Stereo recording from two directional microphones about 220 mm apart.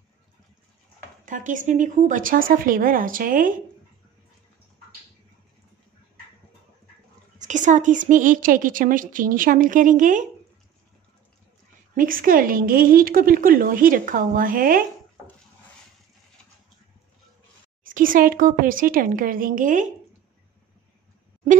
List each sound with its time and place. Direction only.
1.2 s a woman's voice: 35° right (ahead or behind)
7.3 s a woman's voice: 35° right (ahead or behind)
11.9 s a woman's voice: 40° right (ahead or behind)
17.8 s a woman's voice: 40° right (ahead or behind)